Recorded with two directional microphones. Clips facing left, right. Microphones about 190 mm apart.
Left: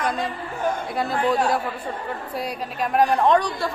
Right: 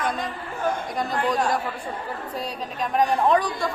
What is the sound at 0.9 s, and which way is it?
A woman's voice, 5° left (ahead or behind).